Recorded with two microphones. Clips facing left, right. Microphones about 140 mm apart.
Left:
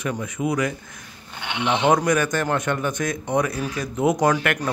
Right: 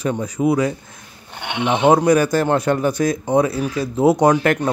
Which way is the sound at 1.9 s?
30° right (ahead or behind).